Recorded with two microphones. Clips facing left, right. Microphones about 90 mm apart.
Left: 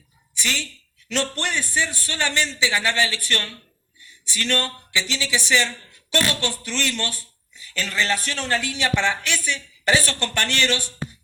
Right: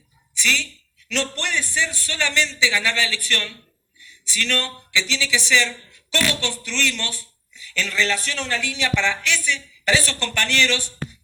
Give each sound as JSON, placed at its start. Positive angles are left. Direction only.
{"t": 0.3, "sound": "a man's voice", "side_deg": 40}
{"t": 4.0, "sound": "a sound", "side_deg": 40}
{"t": 4.9, "sound": "a man's voice", "side_deg": 40}